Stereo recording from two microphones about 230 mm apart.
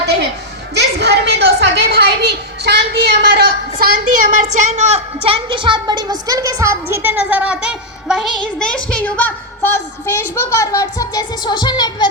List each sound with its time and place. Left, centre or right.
0.0 s music: right
0.8 s a woman's voice: right; by 12.0 s centre